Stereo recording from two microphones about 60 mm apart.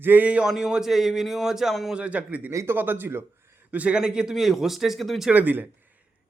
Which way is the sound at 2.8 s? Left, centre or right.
Right.